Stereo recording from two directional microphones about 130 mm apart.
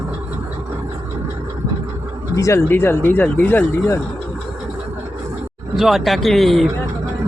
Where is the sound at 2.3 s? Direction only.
20° left (ahead or behind).